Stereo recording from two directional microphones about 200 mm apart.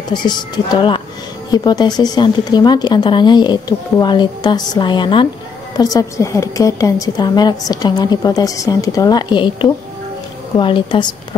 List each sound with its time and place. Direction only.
0.1 s a woman's voice: 20° left (ahead or behind)